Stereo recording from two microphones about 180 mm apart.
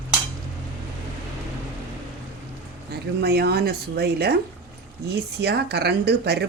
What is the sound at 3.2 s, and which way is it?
Speech, 60° right (ahead or behind).